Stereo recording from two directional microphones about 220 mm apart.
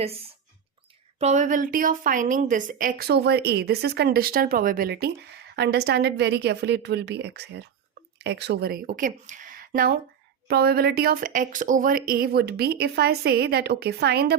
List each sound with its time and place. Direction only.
0.0 s a woman's voice: 25° right (ahead or behind); by 14.3 s 45° right (ahead or behind)